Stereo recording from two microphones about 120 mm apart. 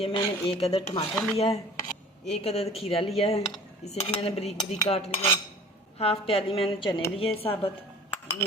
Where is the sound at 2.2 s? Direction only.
60° left (ahead or behind).